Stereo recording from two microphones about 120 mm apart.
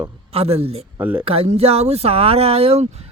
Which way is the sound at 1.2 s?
55° right (ahead or behind).